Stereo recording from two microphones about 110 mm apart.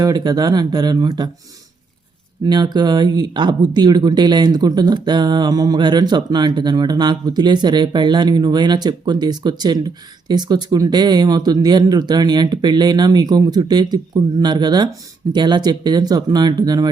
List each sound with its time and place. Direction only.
0.0 s speech: 35° right (ahead or behind)
2.5 s speech: 40° right (ahead or behind)